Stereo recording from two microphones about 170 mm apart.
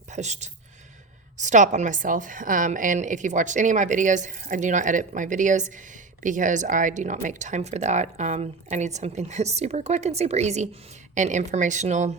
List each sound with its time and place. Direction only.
0.1 s a woman's voice: 40° right (ahead or behind)